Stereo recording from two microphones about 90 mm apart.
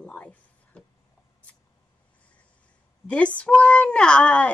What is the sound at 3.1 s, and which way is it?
Speech, 15° left (ahead or behind).